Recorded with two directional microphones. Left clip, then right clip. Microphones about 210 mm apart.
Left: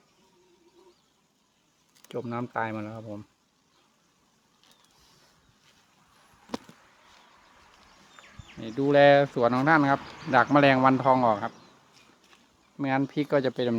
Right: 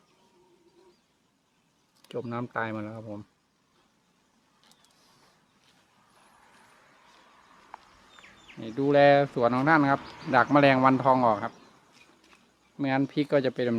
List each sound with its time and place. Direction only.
2.0 s speech: centre (ahead or behind)
8.6 s speech: 10° left (ahead or behind)
12.8 s speech: centre (ahead or behind)